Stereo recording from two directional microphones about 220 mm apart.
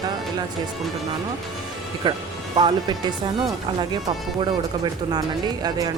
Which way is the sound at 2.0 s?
20° right (ahead or behind).